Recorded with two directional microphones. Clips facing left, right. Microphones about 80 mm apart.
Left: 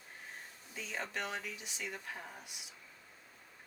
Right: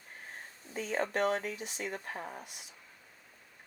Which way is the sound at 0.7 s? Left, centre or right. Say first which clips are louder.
Right 9 dB; right.